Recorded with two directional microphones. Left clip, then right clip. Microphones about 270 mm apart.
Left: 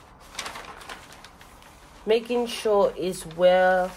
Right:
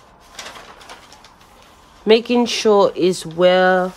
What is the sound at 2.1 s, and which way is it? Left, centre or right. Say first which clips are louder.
Speech: right 9 dB; right.